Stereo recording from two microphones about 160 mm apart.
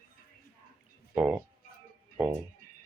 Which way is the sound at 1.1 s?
10° right (ahead or behind).